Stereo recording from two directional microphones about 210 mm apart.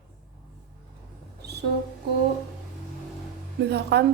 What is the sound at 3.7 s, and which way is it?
Speech, 50° right (ahead or behind).